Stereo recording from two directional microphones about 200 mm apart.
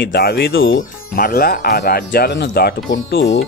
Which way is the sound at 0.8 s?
45° left (ahead or behind).